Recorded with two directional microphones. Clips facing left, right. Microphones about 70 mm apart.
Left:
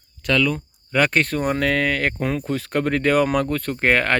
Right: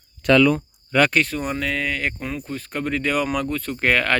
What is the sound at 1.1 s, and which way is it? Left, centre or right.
Speech, left.